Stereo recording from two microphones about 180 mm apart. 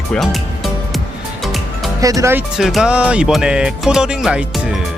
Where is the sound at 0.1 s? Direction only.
Centre (ahead or behind).